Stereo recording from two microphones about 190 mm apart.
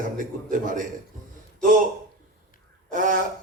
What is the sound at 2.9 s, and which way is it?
Speech, 45° right (ahead or behind).